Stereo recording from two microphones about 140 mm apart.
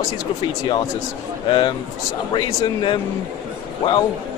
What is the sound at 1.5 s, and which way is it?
A man's voice, 35° left (ahead or behind).